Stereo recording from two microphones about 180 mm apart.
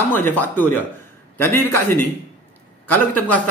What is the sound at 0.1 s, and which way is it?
Speech, 10° left (ahead or behind).